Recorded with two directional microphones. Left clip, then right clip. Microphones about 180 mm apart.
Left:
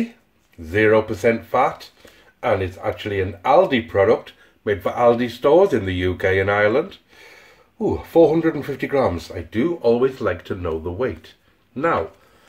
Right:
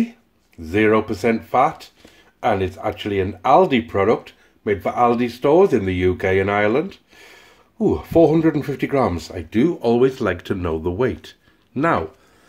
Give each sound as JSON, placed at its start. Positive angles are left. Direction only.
{"t": 0.7, "sound": "speech", "side_deg": -25}